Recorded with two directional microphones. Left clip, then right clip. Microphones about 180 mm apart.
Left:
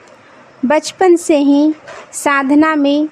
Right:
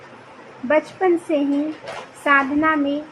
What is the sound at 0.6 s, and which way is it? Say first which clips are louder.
A woman's voice: left 7 dB; 75° left (ahead or behind).